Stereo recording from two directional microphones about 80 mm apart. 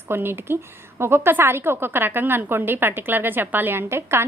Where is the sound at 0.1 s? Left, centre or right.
Right.